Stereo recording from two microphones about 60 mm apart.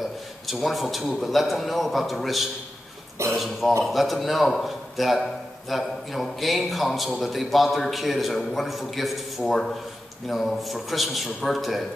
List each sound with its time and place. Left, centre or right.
0.5 s a man's voice: centre